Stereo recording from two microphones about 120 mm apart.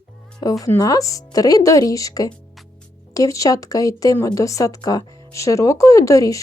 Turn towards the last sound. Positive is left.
turn(degrees=25)  # may be behind; listen again after turning